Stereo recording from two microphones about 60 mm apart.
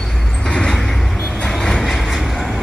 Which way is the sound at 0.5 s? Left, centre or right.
Centre.